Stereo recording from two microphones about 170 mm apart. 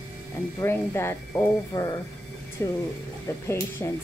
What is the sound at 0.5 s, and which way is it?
Speech, 15° left (ahead or behind).